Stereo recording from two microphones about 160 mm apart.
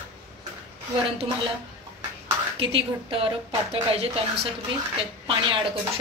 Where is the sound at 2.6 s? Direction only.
35° right (ahead or behind).